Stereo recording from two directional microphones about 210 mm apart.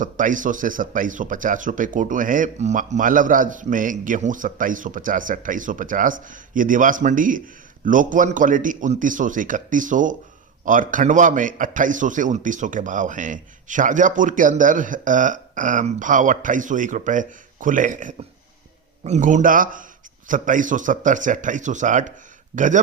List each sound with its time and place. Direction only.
0.0 s speech: 40° right (ahead or behind)